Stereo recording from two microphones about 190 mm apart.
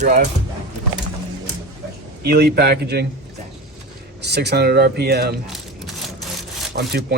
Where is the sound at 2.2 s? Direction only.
55° right (ahead or behind).